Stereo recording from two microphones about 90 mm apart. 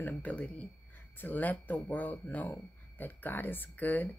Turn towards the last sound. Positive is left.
turn(degrees=20)  # may be behind; listen again after turning